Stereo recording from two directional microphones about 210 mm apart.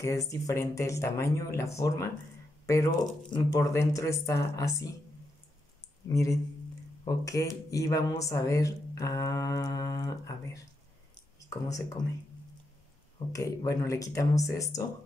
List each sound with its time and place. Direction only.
0.0 s speech: 15° left (ahead or behind)
6.0 s speech: 15° left (ahead or behind)
11.3 s a sound: 15° left (ahead or behind)
13.3 s speech: 15° left (ahead or behind)